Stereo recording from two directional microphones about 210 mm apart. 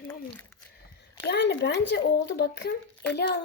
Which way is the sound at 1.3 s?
55° left (ahead or behind).